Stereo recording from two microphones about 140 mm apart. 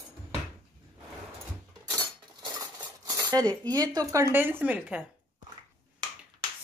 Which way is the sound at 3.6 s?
25° right (ahead or behind).